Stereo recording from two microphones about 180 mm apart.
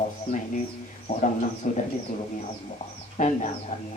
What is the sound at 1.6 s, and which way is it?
Speech, 45° left (ahead or behind).